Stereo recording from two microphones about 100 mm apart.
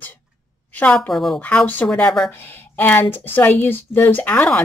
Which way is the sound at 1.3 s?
15° left (ahead or behind).